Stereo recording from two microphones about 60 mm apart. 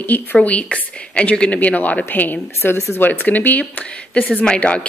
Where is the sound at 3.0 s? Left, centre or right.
Left.